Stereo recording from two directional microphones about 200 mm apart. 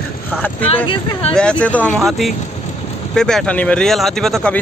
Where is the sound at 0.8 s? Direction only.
25° left (ahead or behind).